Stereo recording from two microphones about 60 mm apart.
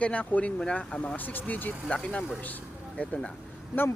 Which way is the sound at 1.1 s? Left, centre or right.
Left.